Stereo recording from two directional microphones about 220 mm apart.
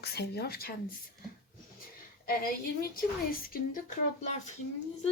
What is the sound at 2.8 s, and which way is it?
A woman's voice, 40° left (ahead or behind).